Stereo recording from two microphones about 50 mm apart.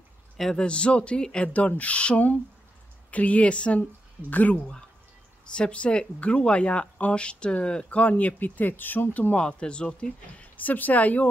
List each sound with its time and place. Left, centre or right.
0.4 s speech: centre
0.7 s speech: left
1.5 s speech: left
4.3 s speech: left
5.5 s speech: left
9.4 s speech: left